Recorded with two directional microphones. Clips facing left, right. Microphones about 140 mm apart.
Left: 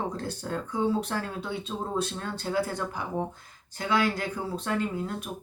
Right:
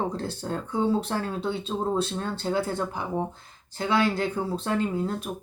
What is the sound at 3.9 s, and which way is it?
Speech, 25° right (ahead or behind).